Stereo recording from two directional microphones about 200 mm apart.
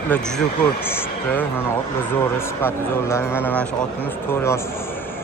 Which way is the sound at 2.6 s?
10° left (ahead or behind).